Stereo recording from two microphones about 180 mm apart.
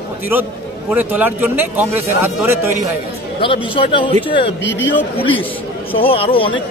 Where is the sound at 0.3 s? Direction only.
10° right (ahead or behind).